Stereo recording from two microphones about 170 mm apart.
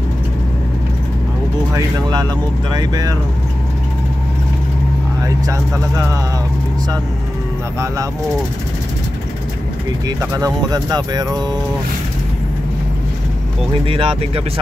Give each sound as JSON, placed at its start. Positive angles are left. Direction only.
{"t": 1.7, "sound": "speech", "side_deg": -20}
{"t": 5.2, "sound": "speech", "side_deg": -20}
{"t": 10.0, "sound": "speech", "side_deg": -20}
{"t": 13.8, "sound": "speech", "side_deg": -30}